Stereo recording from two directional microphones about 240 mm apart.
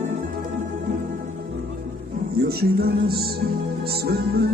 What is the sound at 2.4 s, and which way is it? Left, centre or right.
Music, right.